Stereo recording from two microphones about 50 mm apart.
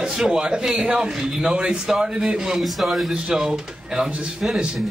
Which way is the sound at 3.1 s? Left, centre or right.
Centre.